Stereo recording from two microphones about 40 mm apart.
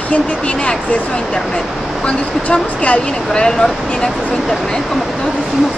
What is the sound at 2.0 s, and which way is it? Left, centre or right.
Speech, left.